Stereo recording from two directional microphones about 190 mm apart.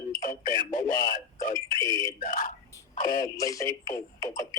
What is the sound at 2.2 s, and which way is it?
Speech, 45° left (ahead or behind).